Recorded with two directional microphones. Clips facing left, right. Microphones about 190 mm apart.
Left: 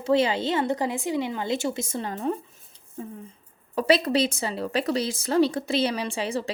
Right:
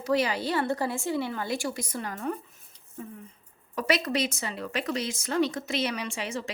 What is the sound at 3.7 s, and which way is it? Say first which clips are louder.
A woman's voice: left 6 dB; 30° left (ahead or behind).